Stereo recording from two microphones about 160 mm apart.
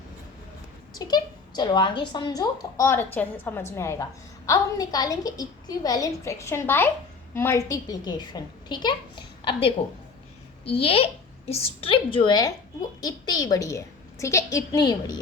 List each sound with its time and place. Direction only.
0.9 s a woman's voice: 25° left (ahead or behind)